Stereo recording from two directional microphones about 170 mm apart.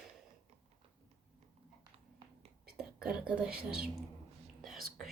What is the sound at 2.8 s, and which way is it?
Whispering, 5° right (ahead or behind).